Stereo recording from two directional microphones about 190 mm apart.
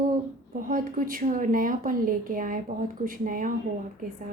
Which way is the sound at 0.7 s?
45° right (ahead or behind).